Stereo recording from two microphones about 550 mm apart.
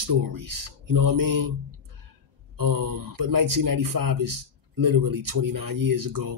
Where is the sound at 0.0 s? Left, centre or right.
Right.